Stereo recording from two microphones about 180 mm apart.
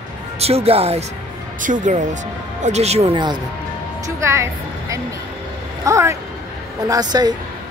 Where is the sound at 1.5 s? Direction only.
45° right (ahead or behind); by 7.3 s 20° right (ahead or behind).